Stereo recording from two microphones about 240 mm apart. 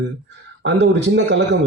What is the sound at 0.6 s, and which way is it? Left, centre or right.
Speech, right.